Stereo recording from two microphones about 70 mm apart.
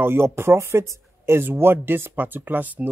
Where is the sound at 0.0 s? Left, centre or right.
Right.